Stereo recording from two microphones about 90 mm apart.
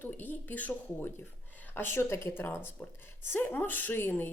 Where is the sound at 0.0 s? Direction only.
20° left (ahead or behind).